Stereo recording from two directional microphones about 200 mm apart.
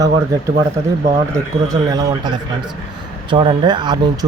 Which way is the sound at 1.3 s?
20° right (ahead or behind).